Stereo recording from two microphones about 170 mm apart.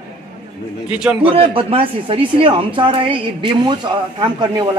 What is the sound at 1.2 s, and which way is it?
A woman's voice, 35° right (ahead or behind).